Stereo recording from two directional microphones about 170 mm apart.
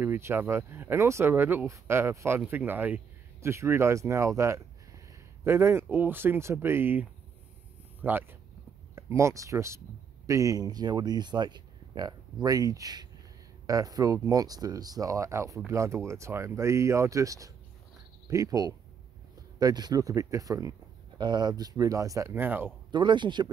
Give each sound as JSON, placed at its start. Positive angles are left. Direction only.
{"t": 0.0, "sound": "speech", "side_deg": -15}
{"t": 22.8, "sound": "speech", "side_deg": -25}